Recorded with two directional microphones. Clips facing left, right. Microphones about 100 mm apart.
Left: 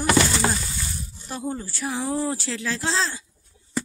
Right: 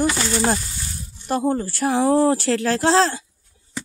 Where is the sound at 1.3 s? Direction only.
55° right (ahead or behind).